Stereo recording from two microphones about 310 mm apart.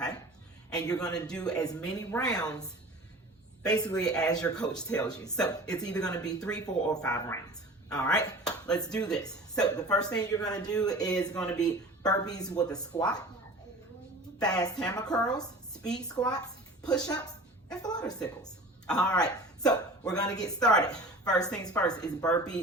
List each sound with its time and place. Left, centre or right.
0.7 s speech: centre
14.3 s a woman's voice: centre